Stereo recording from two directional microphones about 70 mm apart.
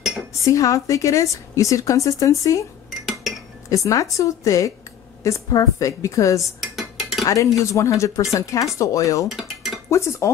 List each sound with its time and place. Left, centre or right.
0.5 s a woman's voice: left
3.7 s a woman's voice: left
6.4 s dishes: centre
7.2 s a woman's voice: left
9.3 s dishes: centre
9.8 s a woman's voice: left